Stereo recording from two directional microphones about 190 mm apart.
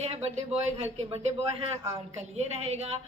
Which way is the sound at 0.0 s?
35° right (ahead or behind).